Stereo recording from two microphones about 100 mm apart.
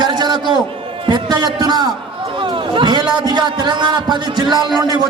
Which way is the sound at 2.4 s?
55° right (ahead or behind).